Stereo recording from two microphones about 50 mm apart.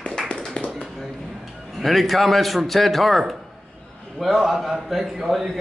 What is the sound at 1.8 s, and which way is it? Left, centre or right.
A man's voice, centre.